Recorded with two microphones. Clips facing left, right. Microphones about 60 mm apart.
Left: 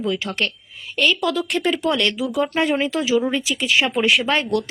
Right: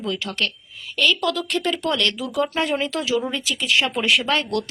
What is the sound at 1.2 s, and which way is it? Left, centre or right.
Speech, centre.